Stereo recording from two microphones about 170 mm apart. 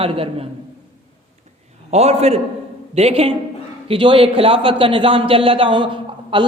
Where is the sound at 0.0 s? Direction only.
35° right (ahead or behind).